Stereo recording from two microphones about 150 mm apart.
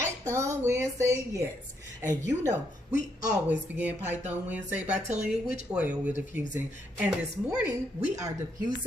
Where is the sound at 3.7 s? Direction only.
10° right (ahead or behind).